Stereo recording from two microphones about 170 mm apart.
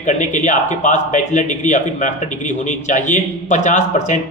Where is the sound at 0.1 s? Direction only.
45° left (ahead or behind).